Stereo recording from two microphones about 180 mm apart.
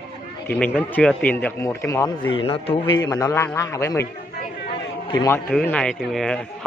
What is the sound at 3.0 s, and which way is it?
Speech, 20° left (ahead or behind).